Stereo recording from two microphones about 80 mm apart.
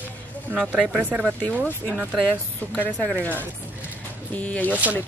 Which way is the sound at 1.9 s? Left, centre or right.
Centre.